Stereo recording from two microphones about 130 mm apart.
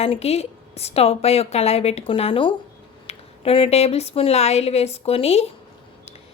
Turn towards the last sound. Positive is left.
turn(degrees=50)  # may be behind; listen again after turning